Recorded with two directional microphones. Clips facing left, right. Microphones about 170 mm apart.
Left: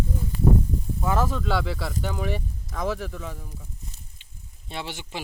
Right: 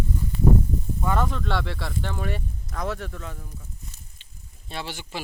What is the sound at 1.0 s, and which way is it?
Speech, 5° left (ahead or behind).